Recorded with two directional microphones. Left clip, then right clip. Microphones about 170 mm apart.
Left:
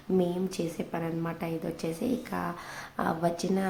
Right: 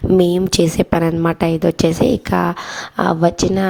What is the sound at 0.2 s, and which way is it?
Speech, 70° right (ahead or behind).